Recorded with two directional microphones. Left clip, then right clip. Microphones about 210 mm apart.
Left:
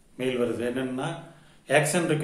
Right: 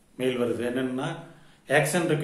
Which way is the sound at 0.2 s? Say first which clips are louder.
Even; 5° right (ahead or behind).